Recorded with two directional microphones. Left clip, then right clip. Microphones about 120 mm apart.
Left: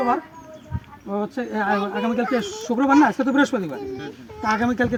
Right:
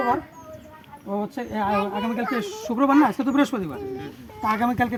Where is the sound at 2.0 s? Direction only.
30° right (ahead or behind).